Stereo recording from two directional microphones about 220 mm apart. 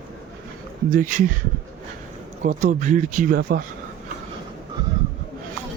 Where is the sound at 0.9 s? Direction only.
35° right (ahead or behind).